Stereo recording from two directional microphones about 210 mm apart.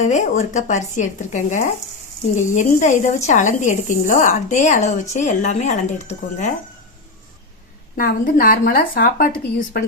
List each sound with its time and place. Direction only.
0.0 s speech: 35° left (ahead or behind)
7.9 s speech: 45° left (ahead or behind)